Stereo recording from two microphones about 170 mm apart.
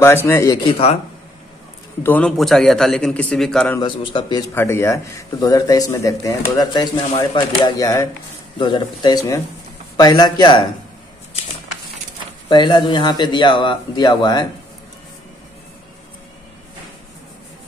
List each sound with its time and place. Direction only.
0.0 s speech: 15° left (ahead or behind)
0.7 s speech: 35° left (ahead or behind)
2.0 s a man's voice: 5° left (ahead or behind)
3.8 s a man's voice: 30° left (ahead or behind)
12.4 s a man's voice: 25° left (ahead or behind)